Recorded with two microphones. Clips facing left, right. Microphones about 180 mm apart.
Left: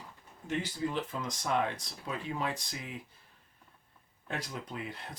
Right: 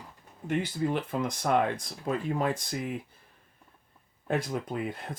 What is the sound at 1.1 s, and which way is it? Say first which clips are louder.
Speech: right 6 dB; 60° right (ahead or behind).